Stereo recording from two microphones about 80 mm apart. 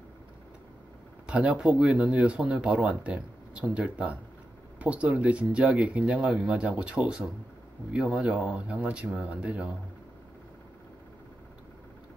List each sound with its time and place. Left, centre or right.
1.2 s speech: centre